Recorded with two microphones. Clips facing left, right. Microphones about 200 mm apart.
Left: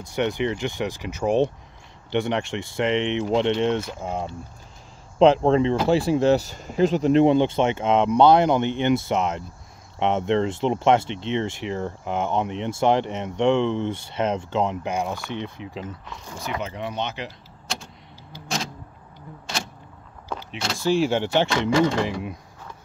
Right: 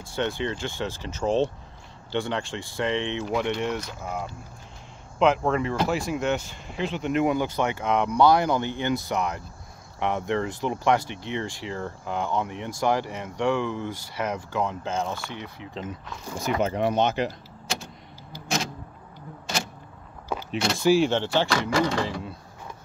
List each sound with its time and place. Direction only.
0.0 s speech: 20° left (ahead or behind)
16.3 s speech: 45° right (ahead or behind)
20.2 s a sound: 10° right (ahead or behind)
21.0 s speech: 15° left (ahead or behind)